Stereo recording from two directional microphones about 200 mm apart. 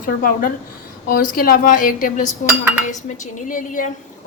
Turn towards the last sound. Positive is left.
turn(degrees=40)  # may be behind; listen again after turning